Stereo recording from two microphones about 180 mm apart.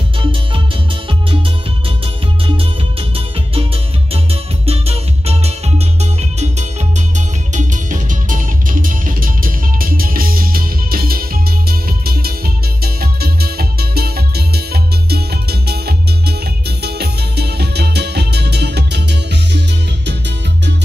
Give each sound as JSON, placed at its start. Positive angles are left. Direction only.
{"t": 0.2, "sound": "music", "side_deg": -30}
{"t": 2.4, "sound": "music", "side_deg": -30}
{"t": 7.2, "sound": "music", "side_deg": -45}